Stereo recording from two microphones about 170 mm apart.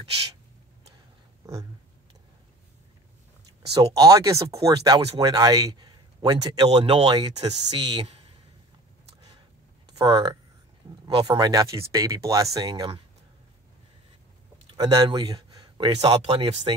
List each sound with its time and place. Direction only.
1.4 s a sound: 20° right (ahead or behind)
3.9 s speech: 20° right (ahead or behind)
9.8 s speech: 25° right (ahead or behind)
14.8 s speech: 25° right (ahead or behind)
16.1 s speech: 35° right (ahead or behind)